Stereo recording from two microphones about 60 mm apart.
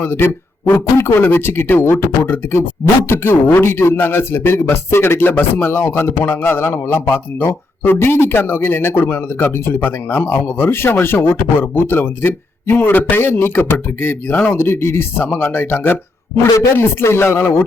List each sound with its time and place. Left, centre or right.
0.0 s speech: left
16.6 s speech: left